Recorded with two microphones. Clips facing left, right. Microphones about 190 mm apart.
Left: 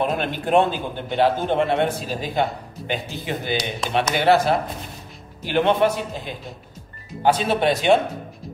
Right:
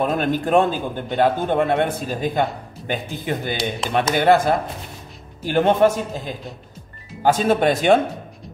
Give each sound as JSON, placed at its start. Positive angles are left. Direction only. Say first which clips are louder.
{"t": 0.0, "sound": "a man's voice", "louder": "right 3 dB", "side_deg": -45}